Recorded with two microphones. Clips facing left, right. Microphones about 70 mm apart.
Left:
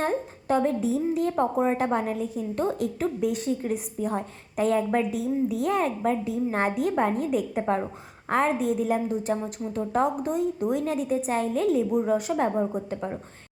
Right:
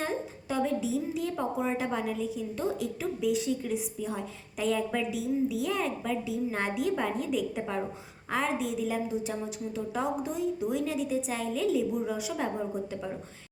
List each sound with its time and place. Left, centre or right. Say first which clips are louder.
0.0 s a woman's voice: left 6 dB; left
7.6 s a woman's voice: left 7 dB; left
8.3 s a woman's voice: left 6 dB; left